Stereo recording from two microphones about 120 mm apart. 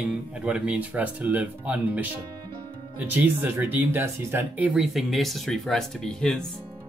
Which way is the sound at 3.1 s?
15° right (ahead or behind).